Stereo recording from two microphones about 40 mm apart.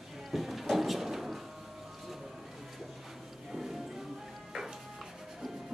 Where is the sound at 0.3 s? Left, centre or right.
Centre.